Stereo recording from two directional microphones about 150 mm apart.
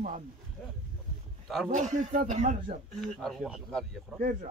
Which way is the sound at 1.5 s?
Centre (ahead or behind).